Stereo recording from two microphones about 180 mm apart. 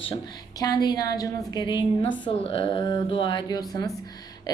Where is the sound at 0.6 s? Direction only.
20° left (ahead or behind).